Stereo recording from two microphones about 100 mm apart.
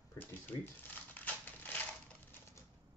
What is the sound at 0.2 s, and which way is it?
Shuffling cards, 20° left (ahead or behind).